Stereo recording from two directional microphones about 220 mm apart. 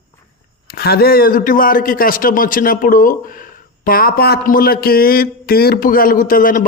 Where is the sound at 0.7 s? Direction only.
45° left (ahead or behind).